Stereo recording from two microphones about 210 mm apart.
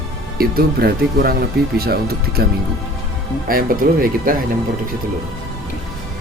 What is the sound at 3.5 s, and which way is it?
Speech, 45° right (ahead or behind).